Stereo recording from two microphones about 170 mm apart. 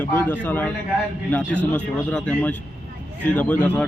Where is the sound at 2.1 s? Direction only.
5° left (ahead or behind).